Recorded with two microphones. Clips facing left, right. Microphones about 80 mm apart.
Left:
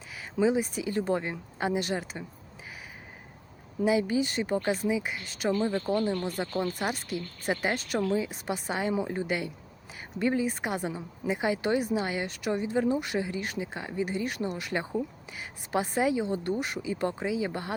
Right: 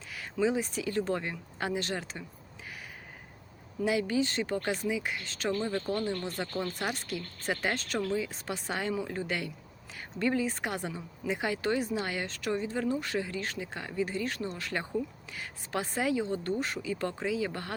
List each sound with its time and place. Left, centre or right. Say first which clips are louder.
0.3 s speech: left 3 dB; centre
3.8 s speech: left 3 dB; centre
8.9 s speech: left 4 dB; centre